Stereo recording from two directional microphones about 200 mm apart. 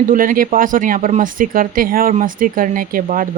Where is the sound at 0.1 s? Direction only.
45° right (ahead or behind).